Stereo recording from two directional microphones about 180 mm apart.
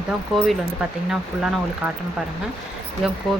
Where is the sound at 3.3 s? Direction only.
Centre (ahead or behind).